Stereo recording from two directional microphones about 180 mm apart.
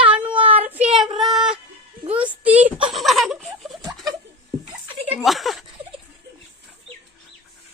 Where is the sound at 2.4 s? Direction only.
10° right (ahead or behind).